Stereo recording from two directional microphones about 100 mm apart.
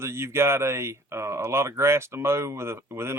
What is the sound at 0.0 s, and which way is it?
Speech, 25° right (ahead or behind).